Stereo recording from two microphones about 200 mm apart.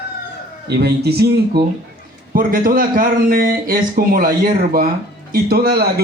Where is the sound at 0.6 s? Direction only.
55° right (ahead or behind).